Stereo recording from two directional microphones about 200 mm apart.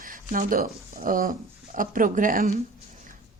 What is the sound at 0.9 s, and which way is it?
Speech, 45° right (ahead or behind).